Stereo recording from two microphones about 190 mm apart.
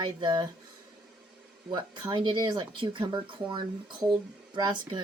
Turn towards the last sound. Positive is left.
turn(degrees=-25)  # may be behind; listen again after turning